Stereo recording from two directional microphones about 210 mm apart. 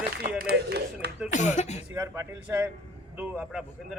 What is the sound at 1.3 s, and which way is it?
Speech, 35° left (ahead or behind).